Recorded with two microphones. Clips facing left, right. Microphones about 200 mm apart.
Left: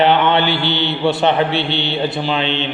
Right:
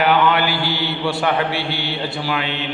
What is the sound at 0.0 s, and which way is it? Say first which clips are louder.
Mantra: left 3 dB; 25° left (ahead or behind).